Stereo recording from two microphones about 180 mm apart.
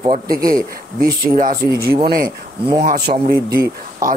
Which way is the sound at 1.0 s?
50° right (ahead or behind).